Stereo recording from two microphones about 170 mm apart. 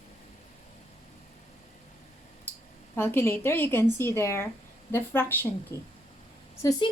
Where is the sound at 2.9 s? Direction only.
15° left (ahead or behind).